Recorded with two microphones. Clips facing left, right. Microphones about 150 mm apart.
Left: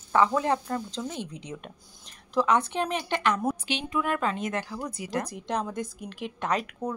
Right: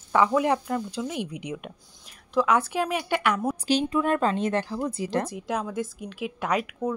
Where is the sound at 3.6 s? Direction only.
35° right (ahead or behind).